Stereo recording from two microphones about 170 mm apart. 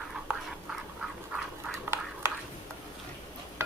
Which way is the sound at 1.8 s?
15° right (ahead or behind).